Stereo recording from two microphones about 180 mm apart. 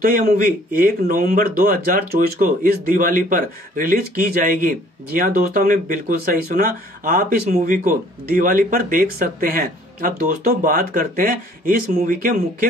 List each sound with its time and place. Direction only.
0.0 s speech: 50° right (ahead or behind)